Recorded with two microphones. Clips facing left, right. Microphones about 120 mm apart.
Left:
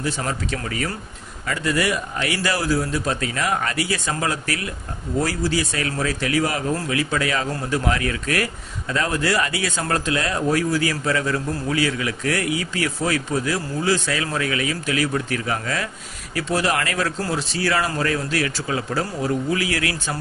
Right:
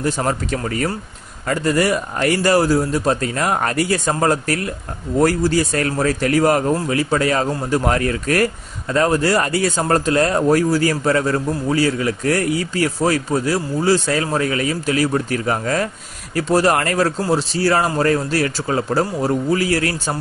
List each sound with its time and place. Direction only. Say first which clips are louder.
0.0 s speech: right 5 dB; 45° right (ahead or behind)